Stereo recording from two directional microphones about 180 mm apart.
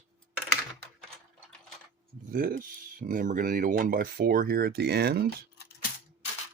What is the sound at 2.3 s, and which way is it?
Speech, 50° right (ahead or behind).